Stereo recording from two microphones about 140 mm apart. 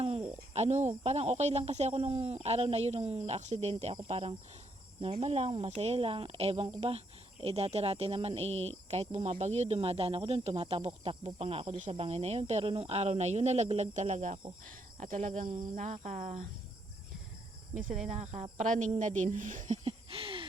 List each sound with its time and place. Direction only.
0.0 s a woman's voice: 45° right (ahead or behind)
18.1 s a woman's voice: 55° right (ahead or behind)
18.5 s a woman's voice: 65° right (ahead or behind); by 20.5 s 40° right (ahead or behind)